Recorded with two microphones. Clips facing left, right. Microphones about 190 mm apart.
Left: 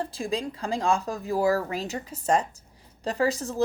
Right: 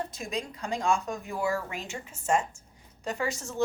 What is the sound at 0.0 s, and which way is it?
Speech, 30° left (ahead or behind).